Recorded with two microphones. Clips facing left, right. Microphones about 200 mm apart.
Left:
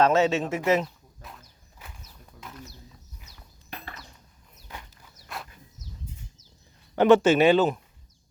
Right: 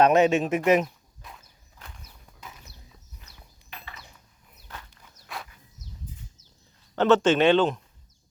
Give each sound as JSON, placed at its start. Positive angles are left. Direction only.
{"t": 0.0, "sound": "speech", "side_deg": -15}
{"t": 1.2, "sound": "walk", "side_deg": 0}
{"t": 4.9, "sound": "walk", "side_deg": 5}
{"t": 6.9, "sound": "speech", "side_deg": 10}